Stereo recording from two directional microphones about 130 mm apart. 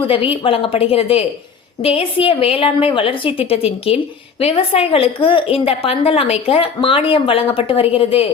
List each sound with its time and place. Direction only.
0.1 s a woman's voice: 45° left (ahead or behind)